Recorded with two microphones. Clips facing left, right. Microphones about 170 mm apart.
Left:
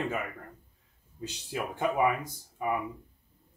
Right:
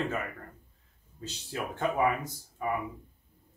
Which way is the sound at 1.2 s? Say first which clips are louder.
Left 1 dB; 15° left (ahead or behind).